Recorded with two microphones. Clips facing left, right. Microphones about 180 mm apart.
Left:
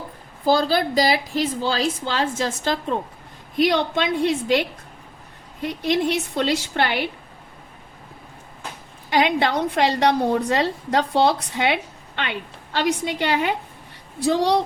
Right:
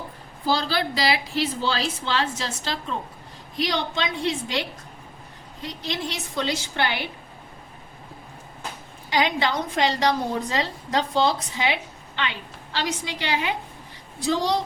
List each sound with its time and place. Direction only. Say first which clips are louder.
0.4 s a woman's voice: left 5 dB; 45° left (ahead or behind)
5.6 s a woman's voice: left 9 dB; 55° left (ahead or behind)
9.0 s a woman's voice: left 4 dB; 55° left (ahead or behind)
14.2 s a woman's voice: left 4 dB; 65° left (ahead or behind)